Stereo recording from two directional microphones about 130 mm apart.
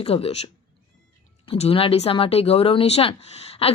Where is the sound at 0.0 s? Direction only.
50° left (ahead or behind).